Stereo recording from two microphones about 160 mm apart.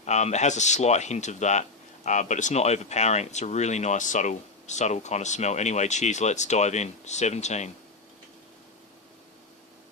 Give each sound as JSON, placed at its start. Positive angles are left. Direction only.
{"t": 0.0, "sound": "speech", "side_deg": 45}